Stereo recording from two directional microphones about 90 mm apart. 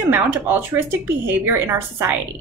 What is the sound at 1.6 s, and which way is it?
Speech, 25° right (ahead or behind).